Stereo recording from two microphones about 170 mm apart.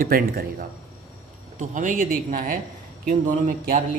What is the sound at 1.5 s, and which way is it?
Speech, 50° right (ahead or behind).